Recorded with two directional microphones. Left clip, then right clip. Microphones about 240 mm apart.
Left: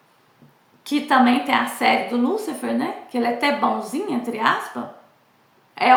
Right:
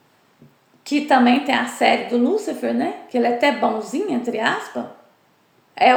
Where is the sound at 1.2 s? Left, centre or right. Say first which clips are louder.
Even; left.